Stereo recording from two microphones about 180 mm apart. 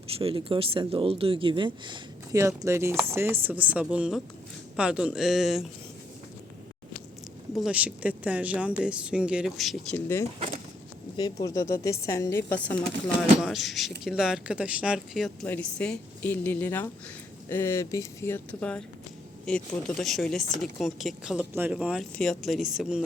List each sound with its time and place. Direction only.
0.2 s speech: 30° right (ahead or behind); by 5.6 s centre (ahead or behind)
7.5 s speech: 5° right (ahead or behind)
11.2 s speech: 20° left (ahead or behind); by 23.0 s 5° right (ahead or behind)